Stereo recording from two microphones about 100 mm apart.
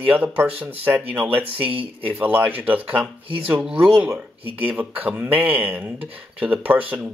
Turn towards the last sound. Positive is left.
turn(degrees=-15)  # may be behind; listen again after turning